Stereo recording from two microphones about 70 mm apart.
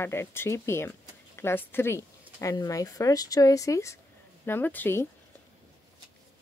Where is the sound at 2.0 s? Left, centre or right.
Left.